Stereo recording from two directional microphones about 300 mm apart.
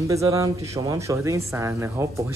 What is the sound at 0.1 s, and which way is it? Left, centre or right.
Speech, centre.